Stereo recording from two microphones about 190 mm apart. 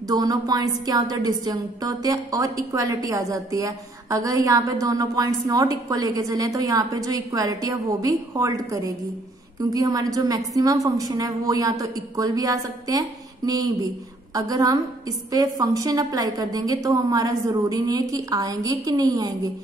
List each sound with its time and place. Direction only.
0.1 s a woman's voice: 20° right (ahead or behind)